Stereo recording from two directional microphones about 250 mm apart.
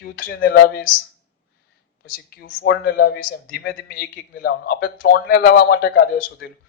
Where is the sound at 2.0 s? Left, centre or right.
Left.